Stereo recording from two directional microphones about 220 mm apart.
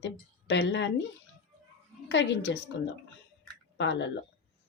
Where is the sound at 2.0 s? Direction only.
55° left (ahead or behind).